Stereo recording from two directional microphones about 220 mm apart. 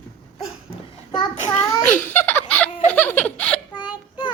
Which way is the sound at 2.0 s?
10° left (ahead or behind).